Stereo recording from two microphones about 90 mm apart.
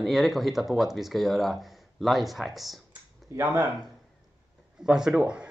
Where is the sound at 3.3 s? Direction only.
35° right (ahead or behind).